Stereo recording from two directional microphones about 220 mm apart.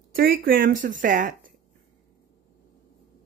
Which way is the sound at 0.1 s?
40° right (ahead or behind).